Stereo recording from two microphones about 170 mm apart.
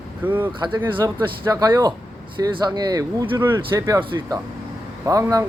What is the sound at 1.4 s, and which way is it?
Speech, 15° right (ahead or behind).